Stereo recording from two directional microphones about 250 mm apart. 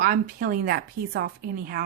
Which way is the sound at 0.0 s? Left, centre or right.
Right.